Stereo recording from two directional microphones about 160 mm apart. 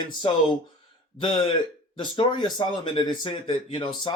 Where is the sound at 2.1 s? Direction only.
30° left (ahead or behind).